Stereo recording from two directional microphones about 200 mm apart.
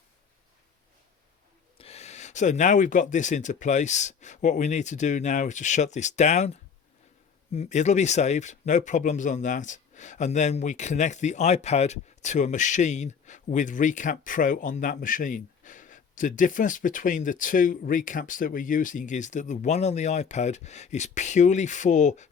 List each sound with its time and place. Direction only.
1.8 s speech: 30° left (ahead or behind)